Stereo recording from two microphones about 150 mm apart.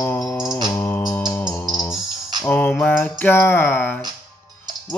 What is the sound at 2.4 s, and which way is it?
Music, 15° left (ahead or behind).